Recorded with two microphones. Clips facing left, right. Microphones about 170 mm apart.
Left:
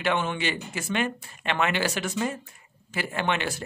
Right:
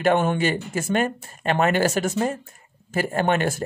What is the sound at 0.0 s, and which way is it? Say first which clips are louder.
Speech: right 7 dB; 45° right (ahead or behind).